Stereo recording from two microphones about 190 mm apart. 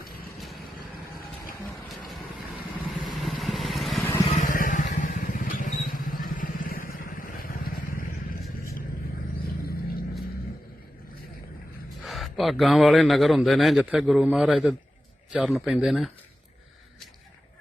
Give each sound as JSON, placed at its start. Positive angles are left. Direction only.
{"t": 3.1, "sound": "vehicle", "side_deg": 0}
{"t": 4.3, "sound": "vehicle", "side_deg": 40}
{"t": 12.0, "sound": "speech", "side_deg": 0}